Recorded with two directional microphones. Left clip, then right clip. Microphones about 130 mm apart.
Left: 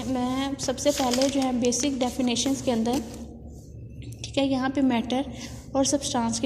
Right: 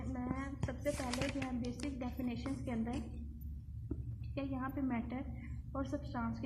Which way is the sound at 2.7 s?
30° left (ahead or behind).